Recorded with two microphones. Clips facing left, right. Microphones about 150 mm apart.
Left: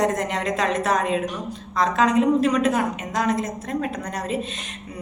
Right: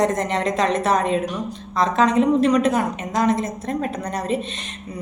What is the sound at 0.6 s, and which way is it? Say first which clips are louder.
A woman's voice: right 1 dB; 5° left (ahead or behind).